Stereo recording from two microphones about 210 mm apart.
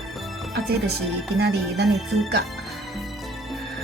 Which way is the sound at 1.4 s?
50° right (ahead or behind).